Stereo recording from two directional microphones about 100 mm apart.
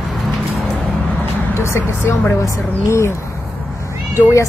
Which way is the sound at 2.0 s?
20° left (ahead or behind).